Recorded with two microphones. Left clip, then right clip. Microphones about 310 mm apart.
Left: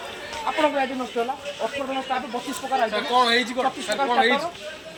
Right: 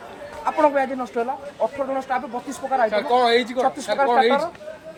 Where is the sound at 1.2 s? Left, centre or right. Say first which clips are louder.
Right 3 dB; centre.